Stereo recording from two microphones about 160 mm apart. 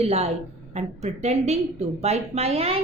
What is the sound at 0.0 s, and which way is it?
A woman's voice, 40° right (ahead or behind).